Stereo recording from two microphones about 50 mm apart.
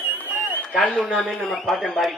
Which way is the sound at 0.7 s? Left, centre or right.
Centre.